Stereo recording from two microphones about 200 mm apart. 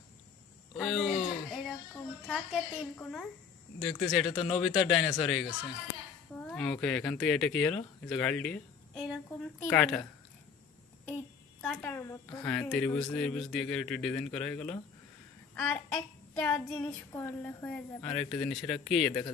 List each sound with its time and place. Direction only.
0.8 s speech: centre (ahead or behind)
1.1 s a sound: 25° left (ahead or behind)
2.2 s speech: centre (ahead or behind)
8.1 s a sound: 5° left (ahead or behind)
11.6 s child singing: 5° left (ahead or behind)
12.4 s speech: 5° left (ahead or behind)
15.5 s child singing: 10° left (ahead or behind)